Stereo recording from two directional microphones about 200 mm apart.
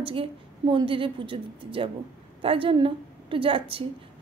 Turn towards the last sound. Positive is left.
turn(degrees=-25)  # may be behind; listen again after turning